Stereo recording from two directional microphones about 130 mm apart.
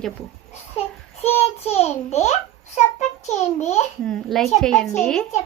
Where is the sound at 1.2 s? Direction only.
50° left (ahead or behind).